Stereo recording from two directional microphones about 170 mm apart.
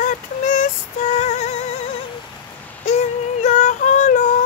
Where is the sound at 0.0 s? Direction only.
50° left (ahead or behind).